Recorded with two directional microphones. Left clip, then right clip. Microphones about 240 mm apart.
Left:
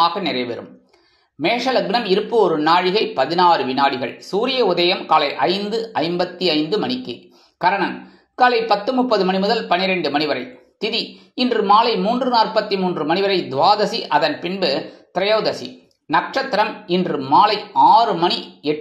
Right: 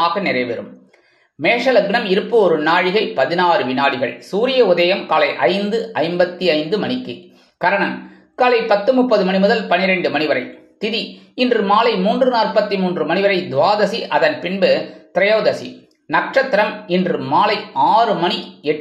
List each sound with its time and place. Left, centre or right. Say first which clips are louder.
0.0 s speech: right 1 dB; centre
1.6 s speech: right 4 dB; centre
8.4 s speech: right 1 dB; centre